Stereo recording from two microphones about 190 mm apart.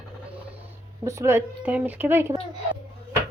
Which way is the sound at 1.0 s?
15° right (ahead or behind).